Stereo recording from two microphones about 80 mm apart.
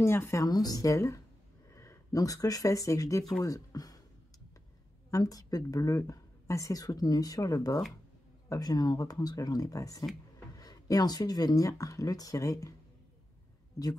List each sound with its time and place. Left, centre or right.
0.0 s speech: left
0.5 s speech: left
5.1 s speech: left